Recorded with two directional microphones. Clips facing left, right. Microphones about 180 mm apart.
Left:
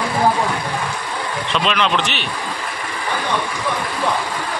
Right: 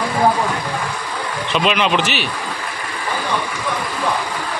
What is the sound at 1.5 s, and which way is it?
Speech, 5° right (ahead or behind).